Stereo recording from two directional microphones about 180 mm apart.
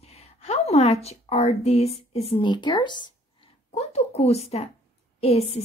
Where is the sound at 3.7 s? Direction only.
35° left (ahead or behind).